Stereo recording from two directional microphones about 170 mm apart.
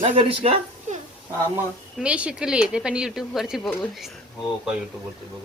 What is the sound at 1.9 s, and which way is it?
Speech, 5° right (ahead or behind).